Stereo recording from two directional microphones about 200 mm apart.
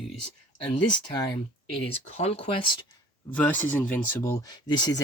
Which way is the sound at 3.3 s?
10° left (ahead or behind).